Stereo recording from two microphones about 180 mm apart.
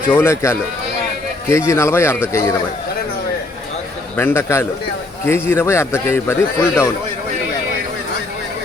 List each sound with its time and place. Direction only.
0.1 s a man's voice: 15° left (ahead or behind)
4.2 s a man's voice: 15° left (ahead or behind)